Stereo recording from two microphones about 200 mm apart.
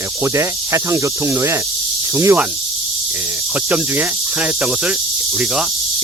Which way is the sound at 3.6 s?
10° right (ahead or behind).